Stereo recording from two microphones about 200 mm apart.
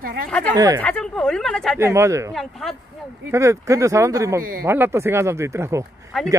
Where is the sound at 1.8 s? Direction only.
15° right (ahead or behind).